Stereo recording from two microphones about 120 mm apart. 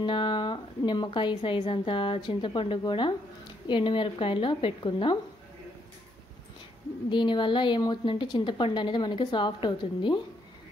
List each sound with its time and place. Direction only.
0.0 s a woman's voice: 45° left (ahead or behind)
7.1 s a woman's voice: 40° left (ahead or behind)